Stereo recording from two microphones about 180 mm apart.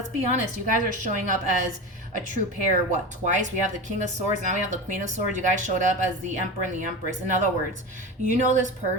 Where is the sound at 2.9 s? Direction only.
40° right (ahead or behind).